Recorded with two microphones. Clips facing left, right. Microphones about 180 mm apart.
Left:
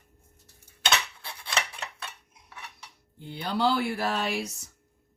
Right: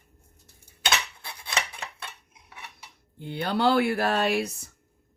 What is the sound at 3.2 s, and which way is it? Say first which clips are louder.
Speech: right 2 dB; 60° right (ahead or behind).